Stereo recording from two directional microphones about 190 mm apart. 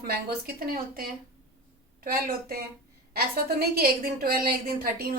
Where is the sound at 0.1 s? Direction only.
50° right (ahead or behind).